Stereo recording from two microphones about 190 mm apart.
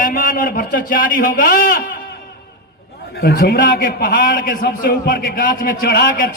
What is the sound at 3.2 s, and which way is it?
A man's voice, 55° left (ahead or behind).